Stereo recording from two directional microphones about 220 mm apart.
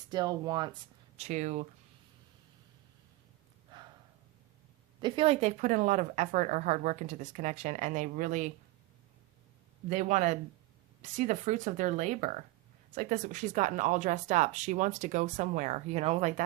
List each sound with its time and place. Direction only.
0.1 s speech: 20° right (ahead or behind)
4.9 s speech: 20° right (ahead or behind)
9.9 s speech: 35° right (ahead or behind)